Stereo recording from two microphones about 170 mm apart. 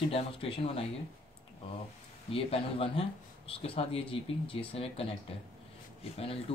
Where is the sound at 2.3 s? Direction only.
35° left (ahead or behind).